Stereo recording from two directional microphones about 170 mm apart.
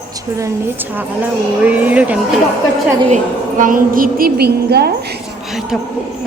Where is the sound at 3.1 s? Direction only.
45° right (ahead or behind); by 4.9 s 70° right (ahead or behind).